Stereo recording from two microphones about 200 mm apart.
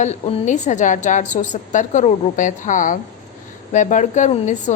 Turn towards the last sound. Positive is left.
turn(degrees=40)  # may be behind; listen again after turning